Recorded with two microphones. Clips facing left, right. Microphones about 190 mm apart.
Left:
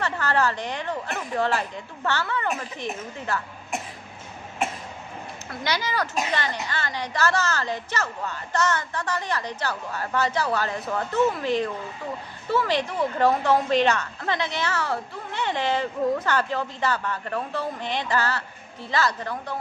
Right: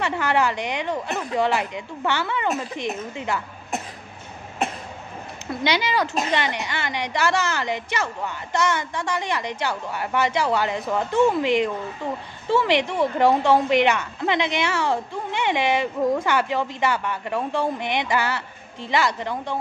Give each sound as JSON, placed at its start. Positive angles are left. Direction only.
{"t": 0.0, "sound": "a woman's voice", "side_deg": -15}
{"t": 5.5, "sound": "a woman's voice", "side_deg": -20}
{"t": 13.2, "sound": "a woman's voice", "side_deg": -15}